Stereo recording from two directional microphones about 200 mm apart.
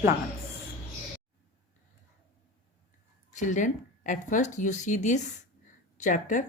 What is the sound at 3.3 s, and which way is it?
Speech, 40° left (ahead or behind).